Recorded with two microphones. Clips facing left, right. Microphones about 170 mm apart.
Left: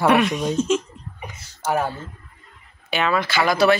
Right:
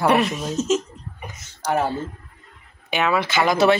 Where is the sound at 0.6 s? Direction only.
40° right (ahead or behind).